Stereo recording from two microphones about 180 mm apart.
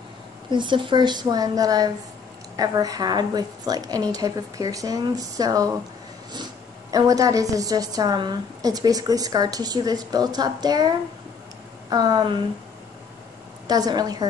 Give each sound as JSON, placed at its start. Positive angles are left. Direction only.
{"t": 0.5, "sound": "a woman's voice", "side_deg": -25}
{"t": 6.9, "sound": "a woman's voice", "side_deg": -20}
{"t": 11.9, "sound": "a woman's voice", "side_deg": -20}
{"t": 13.7, "sound": "a woman's voice", "side_deg": -20}